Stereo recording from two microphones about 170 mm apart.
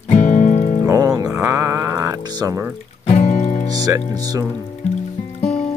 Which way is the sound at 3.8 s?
20° right (ahead or behind).